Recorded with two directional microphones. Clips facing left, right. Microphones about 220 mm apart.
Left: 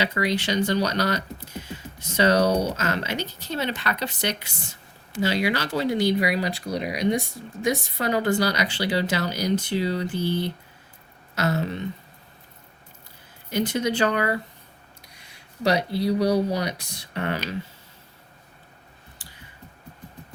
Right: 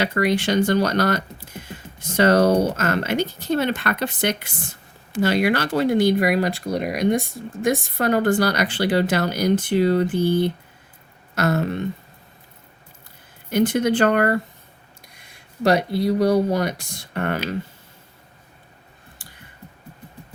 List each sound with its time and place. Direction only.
0.0 s speech: 50° right (ahead or behind)
13.5 s speech: 55° right (ahead or behind)